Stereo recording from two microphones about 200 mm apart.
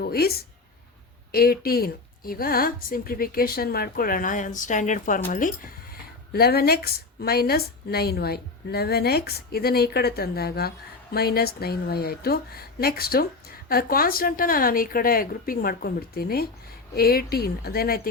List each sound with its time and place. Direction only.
0.0 s a woman's voice: 50° left (ahead or behind)